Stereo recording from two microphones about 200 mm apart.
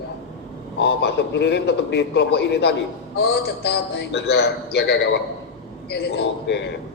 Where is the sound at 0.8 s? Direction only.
60° left (ahead or behind).